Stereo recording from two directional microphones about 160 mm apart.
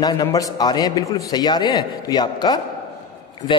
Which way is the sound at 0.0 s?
25° left (ahead or behind).